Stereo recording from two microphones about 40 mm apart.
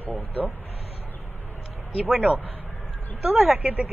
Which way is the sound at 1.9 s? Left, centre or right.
Right.